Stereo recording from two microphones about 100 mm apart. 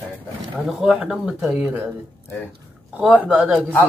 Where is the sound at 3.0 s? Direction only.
15° right (ahead or behind).